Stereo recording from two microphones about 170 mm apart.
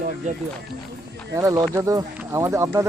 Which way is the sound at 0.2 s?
45° right (ahead or behind).